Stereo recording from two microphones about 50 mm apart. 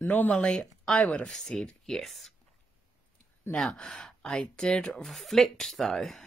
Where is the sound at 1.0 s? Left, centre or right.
Left.